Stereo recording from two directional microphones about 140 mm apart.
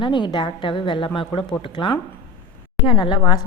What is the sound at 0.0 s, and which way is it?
A woman's voice, 35° left (ahead or behind).